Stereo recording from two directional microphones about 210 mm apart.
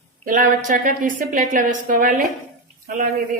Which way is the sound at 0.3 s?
40° right (ahead or behind).